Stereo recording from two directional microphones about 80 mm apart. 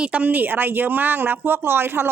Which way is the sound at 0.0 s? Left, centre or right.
Centre.